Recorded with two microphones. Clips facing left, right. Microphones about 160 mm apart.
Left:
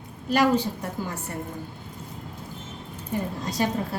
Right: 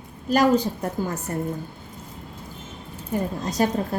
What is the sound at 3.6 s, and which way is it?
Speech, 45° right (ahead or behind).